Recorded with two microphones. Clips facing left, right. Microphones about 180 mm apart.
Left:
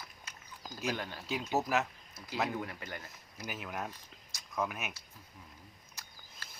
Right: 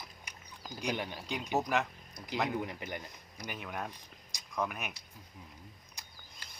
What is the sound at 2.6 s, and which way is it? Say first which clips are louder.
Speech: right 3 dB; 20° right (ahead or behind).